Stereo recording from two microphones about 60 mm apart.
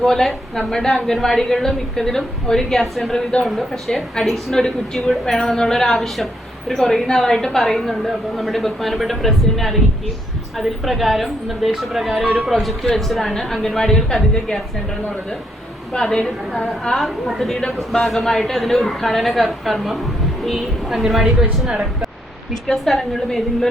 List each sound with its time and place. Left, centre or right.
0.0 s a woman's voice: centre
3.5 s a woman's voice: centre
15.9 s a woman's voice: centre
17.0 s a woman's voice: centre
22.7 s a woman's voice: centre